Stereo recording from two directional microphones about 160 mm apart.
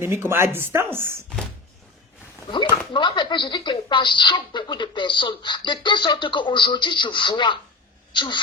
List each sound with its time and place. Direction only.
0.0 s speech: 15° right (ahead or behind)
2.5 s speech: 30° left (ahead or behind)